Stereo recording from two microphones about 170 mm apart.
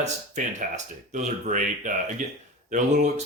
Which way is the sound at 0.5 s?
45° right (ahead or behind).